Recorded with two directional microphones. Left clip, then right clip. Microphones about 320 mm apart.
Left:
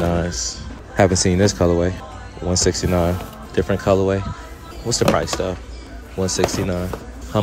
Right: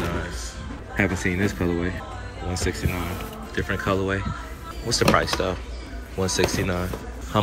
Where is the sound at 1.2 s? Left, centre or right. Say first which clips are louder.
Left 8 dB; centre.